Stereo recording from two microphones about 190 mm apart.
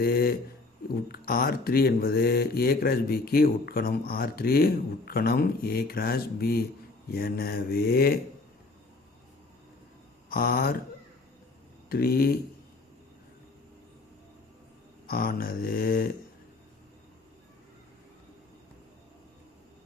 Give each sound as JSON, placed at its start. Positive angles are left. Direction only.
{"t": 0.0, "sound": "speech", "side_deg": 50}
{"t": 10.2, "sound": "speech", "side_deg": 50}
{"t": 11.9, "sound": "speech", "side_deg": 55}
{"t": 15.1, "sound": "speech", "side_deg": 50}